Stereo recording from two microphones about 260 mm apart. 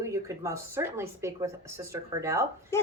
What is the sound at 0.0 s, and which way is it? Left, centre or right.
A woman's voice, centre.